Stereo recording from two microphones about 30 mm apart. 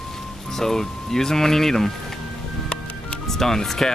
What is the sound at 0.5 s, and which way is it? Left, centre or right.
Speech, centre.